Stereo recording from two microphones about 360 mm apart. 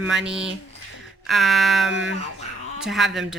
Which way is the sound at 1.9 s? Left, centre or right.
Right.